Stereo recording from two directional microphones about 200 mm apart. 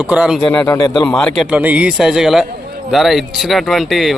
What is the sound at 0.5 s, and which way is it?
A man's voice, 10° left (ahead or behind).